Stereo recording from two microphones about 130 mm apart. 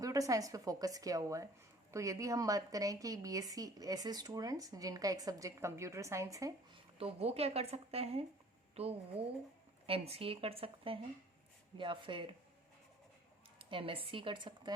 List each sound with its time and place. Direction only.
0.0 s a woman's voice: 25° right (ahead or behind)
7.0 s speech: 50° right (ahead or behind)
13.6 s speech: 40° right (ahead or behind)